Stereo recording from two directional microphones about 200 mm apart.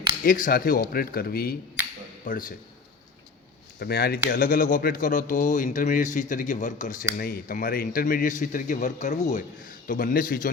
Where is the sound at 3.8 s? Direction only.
50° left (ahead or behind).